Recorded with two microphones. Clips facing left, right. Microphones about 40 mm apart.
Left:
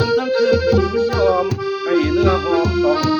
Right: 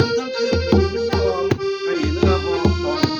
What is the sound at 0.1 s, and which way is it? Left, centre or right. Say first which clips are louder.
Accordion: left 5 dB; left.